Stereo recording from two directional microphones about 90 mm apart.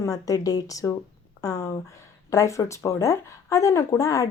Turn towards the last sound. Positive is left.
turn(degrees=35)  # may be behind; listen again after turning